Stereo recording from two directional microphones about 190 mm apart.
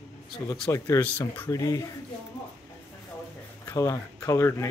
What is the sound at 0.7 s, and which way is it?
Speech, 10° left (ahead or behind).